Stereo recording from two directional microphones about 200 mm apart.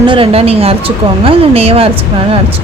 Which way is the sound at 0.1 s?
30° right (ahead or behind).